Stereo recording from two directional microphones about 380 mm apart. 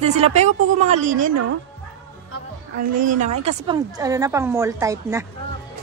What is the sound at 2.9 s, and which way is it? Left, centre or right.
A woman's voice, right.